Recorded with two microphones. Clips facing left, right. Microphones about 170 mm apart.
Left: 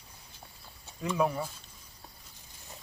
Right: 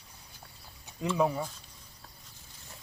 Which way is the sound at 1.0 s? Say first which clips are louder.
Right 2 dB; 20° right (ahead or behind).